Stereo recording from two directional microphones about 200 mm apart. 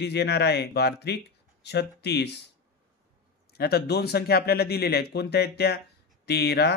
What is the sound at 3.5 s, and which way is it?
A man's voice, 50° left (ahead or behind).